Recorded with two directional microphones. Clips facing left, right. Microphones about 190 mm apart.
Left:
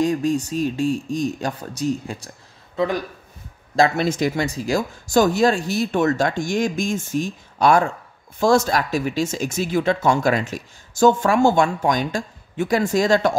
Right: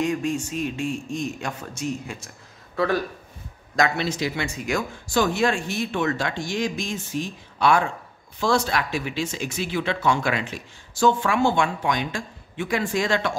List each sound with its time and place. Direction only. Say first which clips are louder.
0.0 s speech: left 5 dB; 35° left (ahead or behind)
2.7 s speech: left 1 dB; 20° left (ahead or behind)
3.9 s speech: left 5 dB; 50° left (ahead or behind)